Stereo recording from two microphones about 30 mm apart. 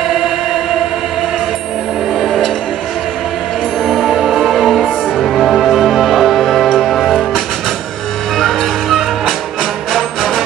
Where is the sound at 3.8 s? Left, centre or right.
Centre.